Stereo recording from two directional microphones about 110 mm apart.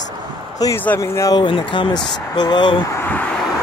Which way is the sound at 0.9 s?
25° left (ahead or behind).